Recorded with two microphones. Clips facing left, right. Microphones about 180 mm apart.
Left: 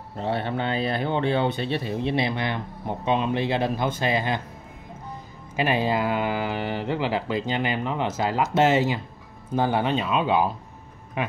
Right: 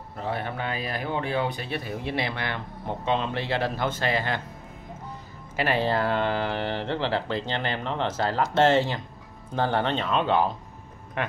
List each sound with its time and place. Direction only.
0.2 s speech: 30° left (ahead or behind)
5.6 s speech: 15° left (ahead or behind)